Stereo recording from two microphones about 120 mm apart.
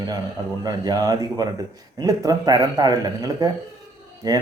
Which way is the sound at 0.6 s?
30° right (ahead or behind).